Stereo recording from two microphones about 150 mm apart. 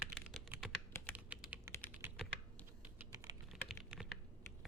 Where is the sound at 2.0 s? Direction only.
15° right (ahead or behind).